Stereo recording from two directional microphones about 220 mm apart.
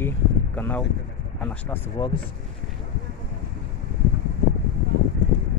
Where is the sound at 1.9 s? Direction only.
20° left (ahead or behind).